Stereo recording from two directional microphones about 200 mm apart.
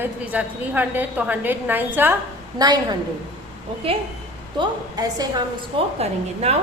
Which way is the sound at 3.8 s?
30° right (ahead or behind).